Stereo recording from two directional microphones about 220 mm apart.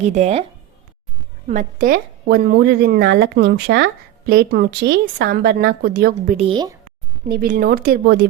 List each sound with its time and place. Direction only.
0.0 s speech: 30° right (ahead or behind)
1.5 s speech: 35° right (ahead or behind)
6.3 s speech: 25° right (ahead or behind)
7.3 s speech: 40° right (ahead or behind)